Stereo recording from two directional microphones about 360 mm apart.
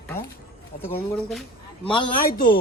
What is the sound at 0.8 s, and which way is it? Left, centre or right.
Speech, centre.